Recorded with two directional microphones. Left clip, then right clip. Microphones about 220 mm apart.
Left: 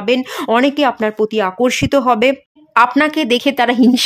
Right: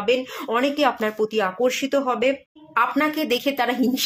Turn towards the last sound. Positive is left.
turn(degrees=40)  # may be behind; listen again after turning